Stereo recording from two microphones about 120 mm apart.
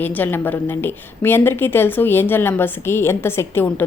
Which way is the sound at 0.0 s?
15° left (ahead or behind).